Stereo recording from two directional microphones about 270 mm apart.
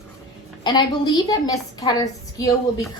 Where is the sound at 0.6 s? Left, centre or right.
Centre.